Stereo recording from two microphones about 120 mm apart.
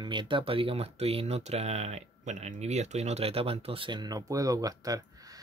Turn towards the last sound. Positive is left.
turn(degrees=-30)  # may be behind; listen again after turning